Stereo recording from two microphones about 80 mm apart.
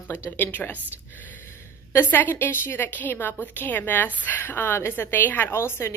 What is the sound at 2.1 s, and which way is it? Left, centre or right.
A woman's voice, left.